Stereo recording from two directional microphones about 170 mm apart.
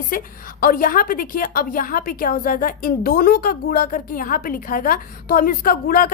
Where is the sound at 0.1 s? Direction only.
55° left (ahead or behind).